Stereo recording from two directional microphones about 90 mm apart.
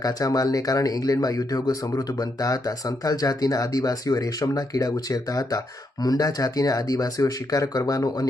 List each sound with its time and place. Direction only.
0.0 s speech: 40° left (ahead or behind)